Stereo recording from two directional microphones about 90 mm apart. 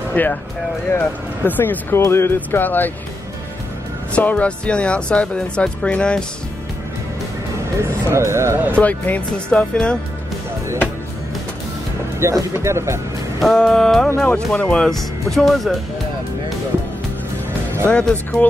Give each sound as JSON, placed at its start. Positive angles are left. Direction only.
{"t": 0.1, "sound": "speech", "side_deg": 20}
{"t": 4.1, "sound": "speech", "side_deg": 15}
{"t": 7.8, "sound": "speech", "side_deg": -30}
{"t": 8.7, "sound": "speech", "side_deg": 15}
{"t": 12.2, "sound": "speech", "side_deg": -30}
{"t": 13.4, "sound": "music", "side_deg": 5}
{"t": 14.2, "sound": "speech", "side_deg": 15}
{"t": 15.3, "sound": "music", "side_deg": 0}
{"t": 17.9, "sound": "speech", "side_deg": 15}